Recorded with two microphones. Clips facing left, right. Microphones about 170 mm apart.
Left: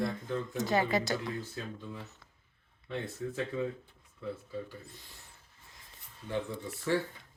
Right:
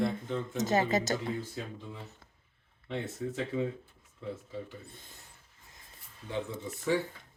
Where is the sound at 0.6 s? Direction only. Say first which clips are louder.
Right 2 dB; 45° right (ahead or behind).